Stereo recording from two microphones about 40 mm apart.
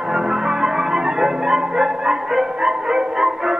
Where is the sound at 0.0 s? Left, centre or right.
Centre.